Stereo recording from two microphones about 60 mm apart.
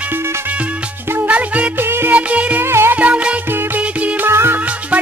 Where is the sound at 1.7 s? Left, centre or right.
Right.